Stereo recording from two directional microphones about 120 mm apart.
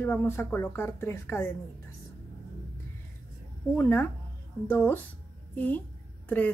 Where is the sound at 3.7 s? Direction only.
20° left (ahead or behind).